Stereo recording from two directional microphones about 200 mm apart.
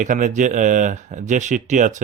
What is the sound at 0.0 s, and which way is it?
Speech, 40° right (ahead or behind).